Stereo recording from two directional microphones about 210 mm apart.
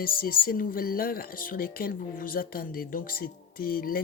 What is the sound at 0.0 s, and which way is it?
Speech, 45° left (ahead or behind).